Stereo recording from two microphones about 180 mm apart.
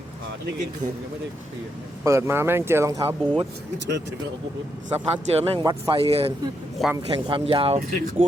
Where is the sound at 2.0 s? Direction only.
15° right (ahead or behind).